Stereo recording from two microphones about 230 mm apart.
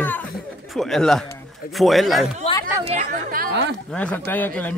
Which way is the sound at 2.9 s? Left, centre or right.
Right.